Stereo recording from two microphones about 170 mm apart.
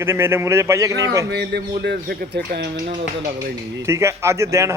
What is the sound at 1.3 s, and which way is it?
Speech, 80° right.